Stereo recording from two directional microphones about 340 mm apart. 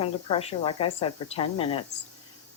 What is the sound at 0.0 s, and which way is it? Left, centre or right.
Speech, centre.